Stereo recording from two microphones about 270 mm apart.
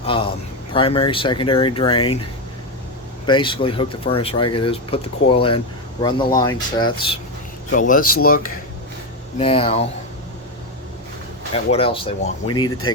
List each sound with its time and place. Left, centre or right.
0.0 s a man's voice: centre
3.2 s speech: centre
6.0 s speech: centre
7.7 s speech: left
9.4 s speech: centre
11.5 s speech: left